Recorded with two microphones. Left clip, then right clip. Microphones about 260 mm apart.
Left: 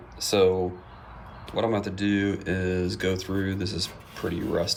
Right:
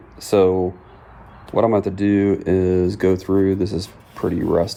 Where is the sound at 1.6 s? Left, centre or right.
Centre.